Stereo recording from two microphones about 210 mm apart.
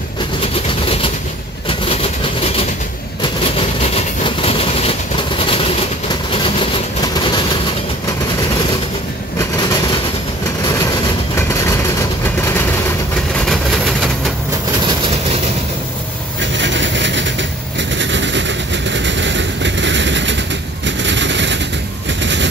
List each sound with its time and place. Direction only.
0.4 s vehicle: 25° left (ahead or behind)
3.2 s train: 30° left (ahead or behind)
9.4 s vehicle: 20° left (ahead or behind)
11.3 s vehicle: 15° left (ahead or behind)
16.5 s vehicle: 60° right (ahead or behind)
20.8 s gunshot: 60° right (ahead or behind)
22.2 s vehicle: 60° right (ahead or behind)